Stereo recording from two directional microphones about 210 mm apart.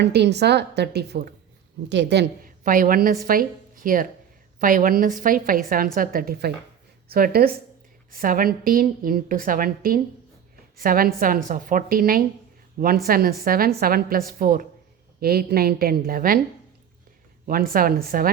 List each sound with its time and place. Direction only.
0.0 s a woman's voice: 55° right (ahead or behind)
17.4 s a woman's voice: 40° right (ahead or behind)